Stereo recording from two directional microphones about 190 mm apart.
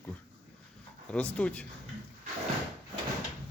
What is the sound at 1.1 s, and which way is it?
Speech, 5° left (ahead or behind).